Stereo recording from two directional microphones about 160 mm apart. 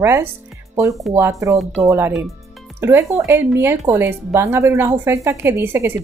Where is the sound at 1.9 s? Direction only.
15° right (ahead or behind).